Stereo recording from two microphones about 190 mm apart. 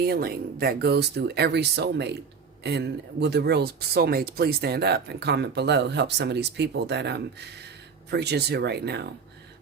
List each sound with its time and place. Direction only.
0.0 s speech: 55° right (ahead or behind)